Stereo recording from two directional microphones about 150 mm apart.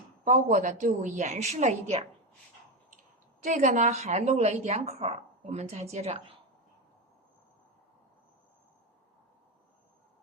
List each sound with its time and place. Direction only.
0.3 s a woman's voice: 55° right (ahead or behind)
3.4 s a woman's voice: 55° right (ahead or behind)